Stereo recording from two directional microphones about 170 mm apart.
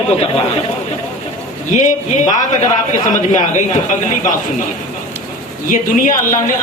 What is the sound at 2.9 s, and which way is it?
Speech, 45° left (ahead or behind).